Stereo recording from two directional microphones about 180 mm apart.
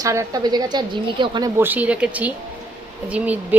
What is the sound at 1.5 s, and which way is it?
Speech, 10° right (ahead or behind).